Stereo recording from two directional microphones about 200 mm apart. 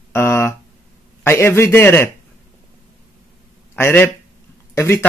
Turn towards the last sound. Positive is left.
turn(degrees=10)  # may be behind; listen again after turning